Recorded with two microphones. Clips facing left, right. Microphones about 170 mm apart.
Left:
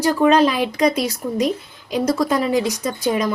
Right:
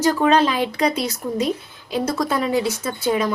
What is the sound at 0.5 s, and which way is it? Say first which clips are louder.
A woman's voice: left 2 dB; 10° left (ahead or behind).